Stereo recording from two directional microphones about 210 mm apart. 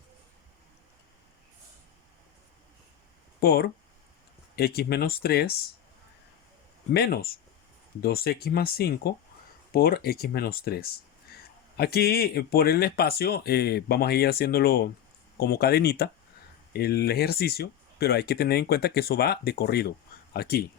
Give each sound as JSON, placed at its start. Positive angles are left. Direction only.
{"t": 3.4, "sound": "speech", "side_deg": 45}
{"t": 6.9, "sound": "speech", "side_deg": 50}